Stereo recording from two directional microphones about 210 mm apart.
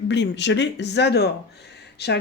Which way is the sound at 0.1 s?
55° left (ahead or behind).